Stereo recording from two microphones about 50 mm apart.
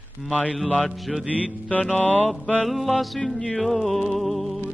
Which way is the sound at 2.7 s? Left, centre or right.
Centre.